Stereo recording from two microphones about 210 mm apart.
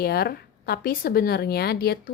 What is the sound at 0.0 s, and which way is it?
Speech, 45° left (ahead or behind).